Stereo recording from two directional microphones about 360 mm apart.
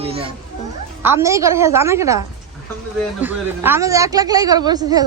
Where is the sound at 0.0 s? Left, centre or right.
Centre.